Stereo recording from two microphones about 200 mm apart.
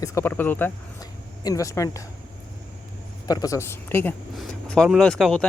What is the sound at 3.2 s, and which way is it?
Speech, 20° left (ahead or behind).